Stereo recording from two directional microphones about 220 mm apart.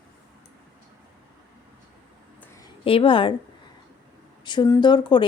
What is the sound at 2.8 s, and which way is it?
Speech, 25° left (ahead or behind).